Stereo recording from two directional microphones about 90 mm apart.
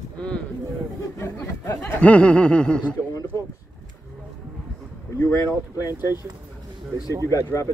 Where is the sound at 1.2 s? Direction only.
30° left (ahead or behind).